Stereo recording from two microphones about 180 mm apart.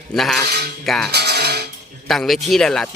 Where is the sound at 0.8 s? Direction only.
Centre (ahead or behind).